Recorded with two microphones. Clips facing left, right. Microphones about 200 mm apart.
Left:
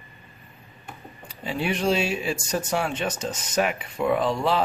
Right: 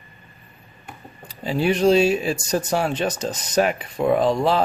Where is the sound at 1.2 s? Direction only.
35° right (ahead or behind).